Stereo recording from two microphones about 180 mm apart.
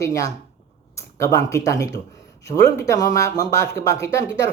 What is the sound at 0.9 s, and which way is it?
Speech, 15° left (ahead or behind).